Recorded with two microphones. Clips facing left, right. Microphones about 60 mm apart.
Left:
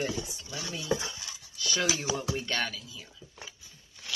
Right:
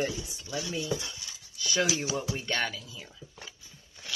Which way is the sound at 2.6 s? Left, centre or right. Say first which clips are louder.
Right 1 dB; right.